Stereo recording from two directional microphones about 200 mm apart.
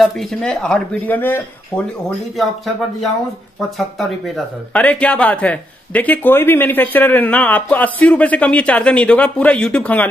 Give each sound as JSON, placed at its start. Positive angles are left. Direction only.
{"t": 0.0, "sound": "speech", "side_deg": 0}
{"t": 4.7, "sound": "speech", "side_deg": 5}